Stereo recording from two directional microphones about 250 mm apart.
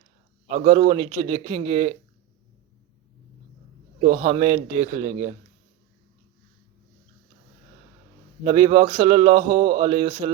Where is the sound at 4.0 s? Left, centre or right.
Right.